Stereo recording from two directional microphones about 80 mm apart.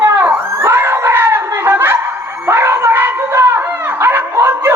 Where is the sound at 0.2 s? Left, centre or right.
Right.